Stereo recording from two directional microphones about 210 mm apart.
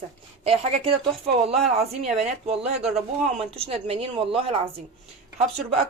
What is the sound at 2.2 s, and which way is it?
A woman's voice, 30° right (ahead or behind).